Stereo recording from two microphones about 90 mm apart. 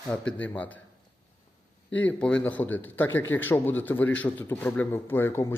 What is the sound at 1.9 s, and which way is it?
A man's voice, 15° left (ahead or behind).